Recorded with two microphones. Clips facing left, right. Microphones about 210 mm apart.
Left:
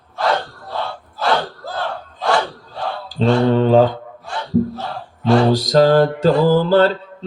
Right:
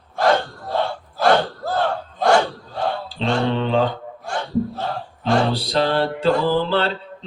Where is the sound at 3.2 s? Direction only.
45° left (ahead or behind).